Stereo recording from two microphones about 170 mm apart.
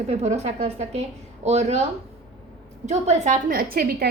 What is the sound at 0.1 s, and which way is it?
A woman's voice, 40° right (ahead or behind).